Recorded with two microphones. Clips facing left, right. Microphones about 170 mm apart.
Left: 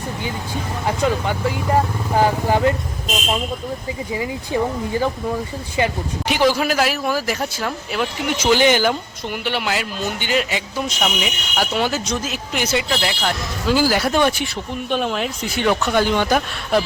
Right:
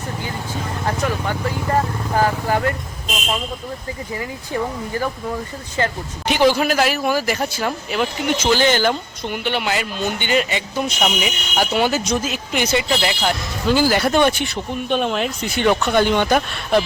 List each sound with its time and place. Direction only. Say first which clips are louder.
0.9 s speech: left 3 dB; 15° left (ahead or behind)
4.1 s speech: left 4 dB; 15° left (ahead or behind)
6.2 s speech: right 2 dB; 5° left (ahead or behind)
8.4 s speech: left 2 dB; 15° left (ahead or behind)